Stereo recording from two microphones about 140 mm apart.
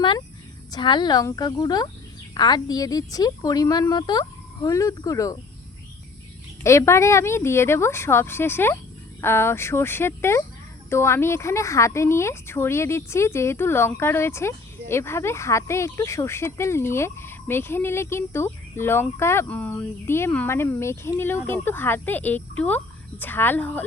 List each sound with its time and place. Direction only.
0.7 s a woman's voice: 35° left (ahead or behind)
6.6 s a woman's voice: 20° left (ahead or behind)